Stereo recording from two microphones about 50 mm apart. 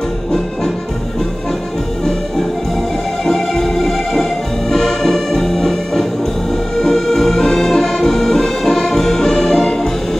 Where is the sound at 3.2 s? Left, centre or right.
Centre.